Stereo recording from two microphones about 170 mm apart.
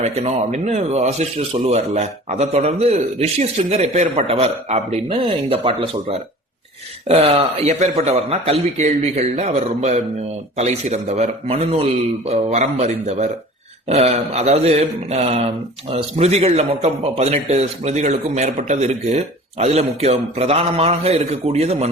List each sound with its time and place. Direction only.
0.0 s a man's voice: 40° right (ahead or behind)